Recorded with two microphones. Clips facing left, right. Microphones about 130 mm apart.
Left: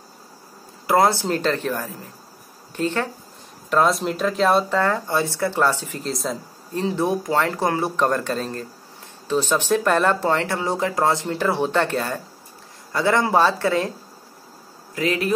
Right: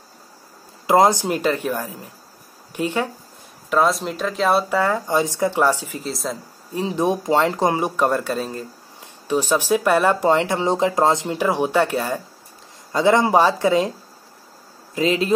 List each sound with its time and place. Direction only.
0.8 s speech: 20° right (ahead or behind)
3.7 s speech: centre (ahead or behind)
6.7 s speech: 15° right (ahead or behind)
15.0 s speech: 25° right (ahead or behind)